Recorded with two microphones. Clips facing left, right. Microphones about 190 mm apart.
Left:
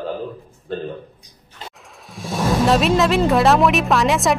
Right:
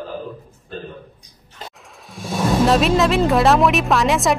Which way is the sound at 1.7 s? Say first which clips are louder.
Even; centre (ahead or behind).